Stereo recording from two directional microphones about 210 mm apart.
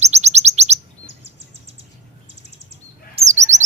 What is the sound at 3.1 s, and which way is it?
Chirp, 35° right (ahead or behind).